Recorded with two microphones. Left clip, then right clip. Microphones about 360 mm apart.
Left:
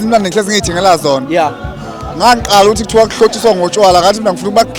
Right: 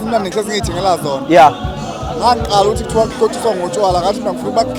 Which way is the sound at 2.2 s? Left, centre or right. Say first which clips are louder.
Left 5 dB; left.